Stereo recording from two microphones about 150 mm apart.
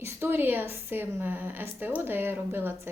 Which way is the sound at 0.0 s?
15° right (ahead or behind).